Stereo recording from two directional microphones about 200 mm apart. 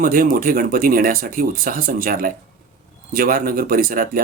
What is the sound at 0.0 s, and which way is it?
Speech, 45° right (ahead or behind).